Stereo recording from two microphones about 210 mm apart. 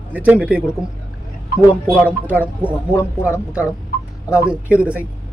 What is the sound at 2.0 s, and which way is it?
Speech, 10° right (ahead or behind).